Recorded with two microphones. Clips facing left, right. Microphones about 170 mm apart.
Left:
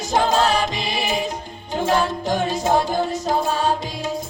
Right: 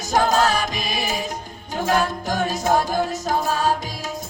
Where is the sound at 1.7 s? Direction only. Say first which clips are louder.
Left 1 dB; 25° left (ahead or behind).